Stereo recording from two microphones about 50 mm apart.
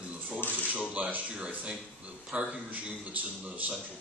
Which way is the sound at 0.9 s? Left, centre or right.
Right.